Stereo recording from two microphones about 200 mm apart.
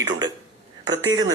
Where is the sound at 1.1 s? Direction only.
90° right.